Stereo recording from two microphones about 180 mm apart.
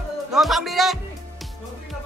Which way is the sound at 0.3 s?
Centre (ahead or behind).